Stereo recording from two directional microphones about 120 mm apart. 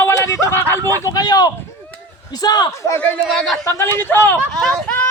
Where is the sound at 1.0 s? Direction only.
30° left (ahead or behind).